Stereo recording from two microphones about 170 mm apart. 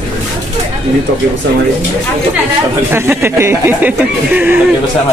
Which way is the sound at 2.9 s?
15° right (ahead or behind).